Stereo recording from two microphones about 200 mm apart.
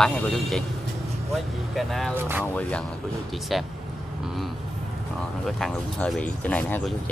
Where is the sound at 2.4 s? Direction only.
5° left (ahead or behind).